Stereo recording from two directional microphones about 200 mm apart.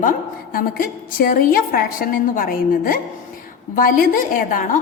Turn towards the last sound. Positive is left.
turn(degrees=45)  # may be behind; listen again after turning